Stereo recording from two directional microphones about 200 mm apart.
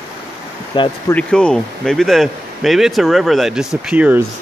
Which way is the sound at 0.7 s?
25° left (ahead or behind).